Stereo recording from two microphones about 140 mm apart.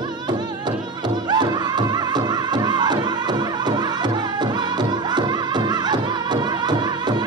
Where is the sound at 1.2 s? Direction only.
30° right (ahead or behind).